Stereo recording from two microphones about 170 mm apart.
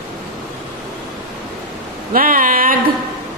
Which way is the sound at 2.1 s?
55° right (ahead or behind).